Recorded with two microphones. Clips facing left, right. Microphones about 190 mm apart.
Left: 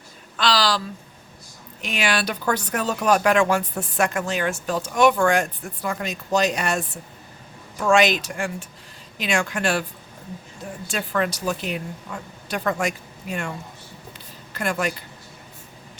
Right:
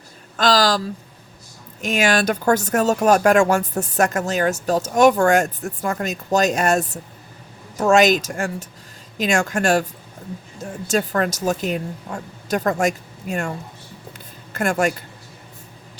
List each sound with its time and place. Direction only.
0.3 s speech: 45° right (ahead or behind)
1.8 s speech: 45° right (ahead or behind)
14.5 s speech: 45° right (ahead or behind)